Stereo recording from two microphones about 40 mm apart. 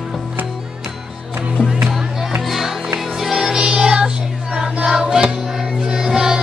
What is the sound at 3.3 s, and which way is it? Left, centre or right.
Music, centre.